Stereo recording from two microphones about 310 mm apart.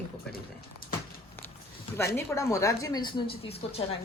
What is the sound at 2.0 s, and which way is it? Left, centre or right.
A woman's voice, centre.